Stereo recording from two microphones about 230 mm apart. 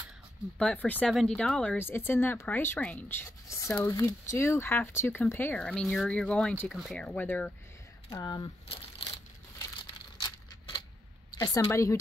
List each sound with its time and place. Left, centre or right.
0.6 s speech: centre
8.1 s speech: centre
11.3 s speech: centre